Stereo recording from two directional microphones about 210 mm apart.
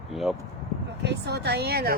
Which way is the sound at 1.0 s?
50° right (ahead or behind).